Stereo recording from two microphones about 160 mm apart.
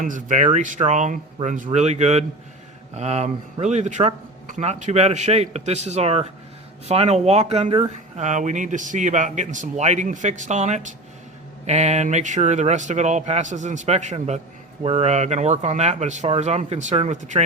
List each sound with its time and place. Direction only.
0.0 s speech: 55° right (ahead or behind)